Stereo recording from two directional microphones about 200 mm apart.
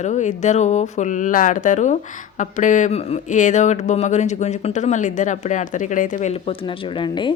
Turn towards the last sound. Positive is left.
turn(degrees=25)  # may be behind; listen again after turning